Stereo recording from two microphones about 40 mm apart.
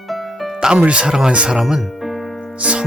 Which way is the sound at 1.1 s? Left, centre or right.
Centre.